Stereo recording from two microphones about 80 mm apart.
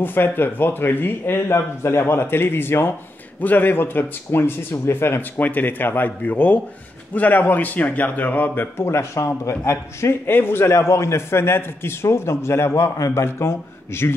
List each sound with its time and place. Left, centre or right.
0.0 s a man's voice: left
8.7 s a man's voice: left